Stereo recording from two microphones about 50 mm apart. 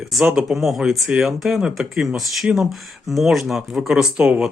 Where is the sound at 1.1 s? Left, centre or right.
Right.